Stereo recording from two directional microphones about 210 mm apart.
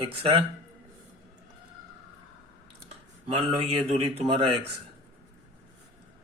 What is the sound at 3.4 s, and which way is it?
Speech, 25° right (ahead or behind).